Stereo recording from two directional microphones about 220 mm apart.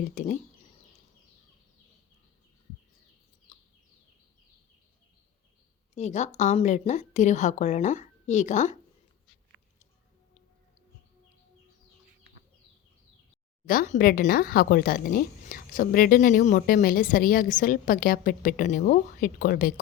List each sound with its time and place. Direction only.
0.1 s speech: 35° left (ahead or behind)
3.5 s a sound: 35° left (ahead or behind)
5.9 s speech: 30° left (ahead or behind)
13.7 s speech: 35° left (ahead or behind)